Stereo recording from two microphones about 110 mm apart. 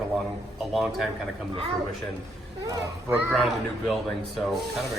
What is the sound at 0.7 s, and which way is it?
Speech, 5° right (ahead or behind).